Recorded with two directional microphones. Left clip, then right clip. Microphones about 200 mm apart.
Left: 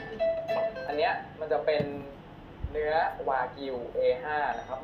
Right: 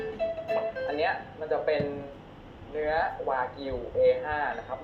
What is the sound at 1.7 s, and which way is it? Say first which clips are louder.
Speech: even; 20° left (ahead or behind).